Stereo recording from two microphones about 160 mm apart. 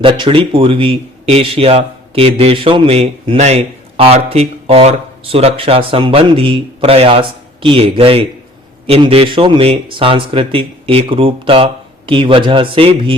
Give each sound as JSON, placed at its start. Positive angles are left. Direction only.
{"t": 0.0, "sound": "speech", "side_deg": -30}